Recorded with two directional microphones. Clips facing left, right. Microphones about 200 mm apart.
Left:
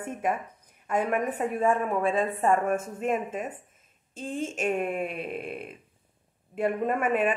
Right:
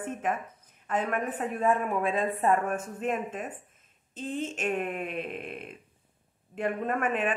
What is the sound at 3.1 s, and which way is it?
Speech, 10° left (ahead or behind).